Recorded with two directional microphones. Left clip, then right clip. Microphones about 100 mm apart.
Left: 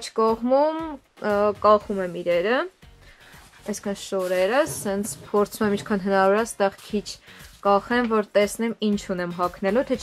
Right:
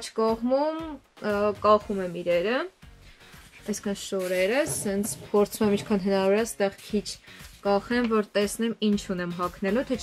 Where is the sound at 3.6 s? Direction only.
15° left (ahead or behind).